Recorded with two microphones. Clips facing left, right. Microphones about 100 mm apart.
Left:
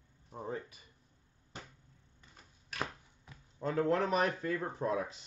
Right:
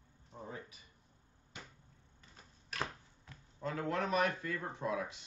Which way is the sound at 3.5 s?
30° left (ahead or behind).